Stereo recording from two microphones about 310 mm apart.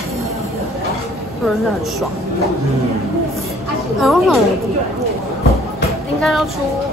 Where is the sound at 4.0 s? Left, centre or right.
Centre.